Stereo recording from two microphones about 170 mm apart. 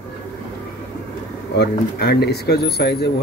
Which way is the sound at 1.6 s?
70° left (ahead or behind).